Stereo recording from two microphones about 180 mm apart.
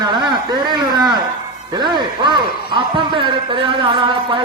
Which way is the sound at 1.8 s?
25° right (ahead or behind).